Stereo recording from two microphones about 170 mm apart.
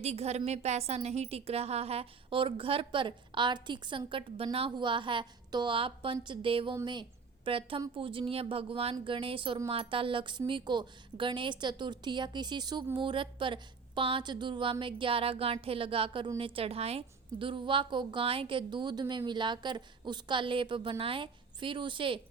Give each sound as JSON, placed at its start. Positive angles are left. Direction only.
{"t": 0.0, "sound": "a woman's voice", "side_deg": -40}